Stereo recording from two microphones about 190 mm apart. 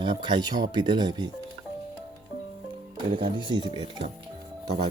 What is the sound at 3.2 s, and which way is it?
Speech, 25° right (ahead or behind).